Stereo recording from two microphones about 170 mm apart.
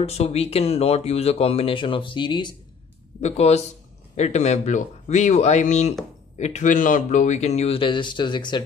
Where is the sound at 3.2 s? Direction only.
40° left (ahead or behind).